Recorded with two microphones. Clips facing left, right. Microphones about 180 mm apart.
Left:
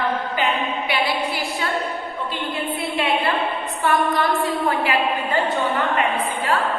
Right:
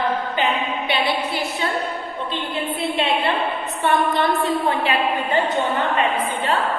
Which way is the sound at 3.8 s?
25° right (ahead or behind).